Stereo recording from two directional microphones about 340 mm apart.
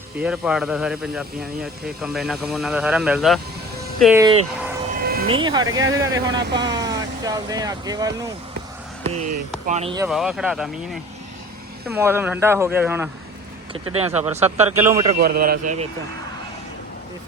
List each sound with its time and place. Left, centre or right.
0.2 s speech: centre
4.9 s vehicle: right
5.3 s speech: centre
10.1 s speech: centre
11.9 s speech: centre
13.9 s speech: centre
14.8 s speech: centre
15.1 s speech: right